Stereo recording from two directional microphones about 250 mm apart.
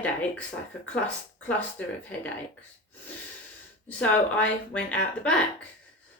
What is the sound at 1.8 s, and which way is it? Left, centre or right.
Speech, centre.